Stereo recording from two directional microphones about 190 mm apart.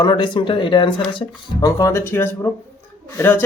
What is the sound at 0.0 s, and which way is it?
Speech, 25° left (ahead or behind).